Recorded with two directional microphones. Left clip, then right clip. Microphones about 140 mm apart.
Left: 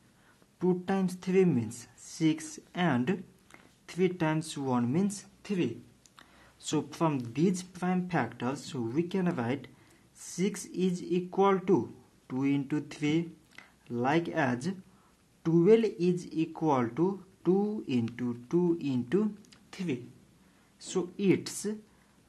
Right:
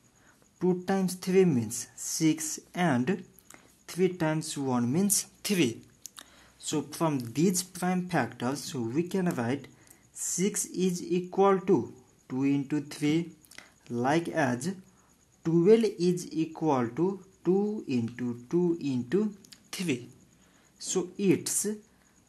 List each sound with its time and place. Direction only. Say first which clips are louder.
0.6 s speech: right 2 dB; 25° right (ahead or behind)
5.4 s speech: right 4 dB; 45° right (ahead or behind)
6.6 s speech: even; centre (ahead or behind)
6.9 s speech: right 2 dB; 15° right (ahead or behind)
7.3 s speech: right 2 dB; 30° right (ahead or behind)
10.7 s speech: right 2 dB; 25° right (ahead or behind)